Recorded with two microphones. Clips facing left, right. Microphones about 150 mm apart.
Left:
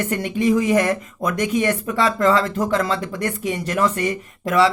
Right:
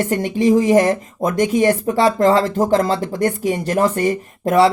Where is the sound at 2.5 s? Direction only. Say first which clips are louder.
Right 5 dB; 45° right (ahead or behind).